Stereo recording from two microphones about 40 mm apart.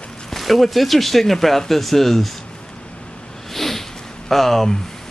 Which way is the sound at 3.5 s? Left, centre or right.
Centre.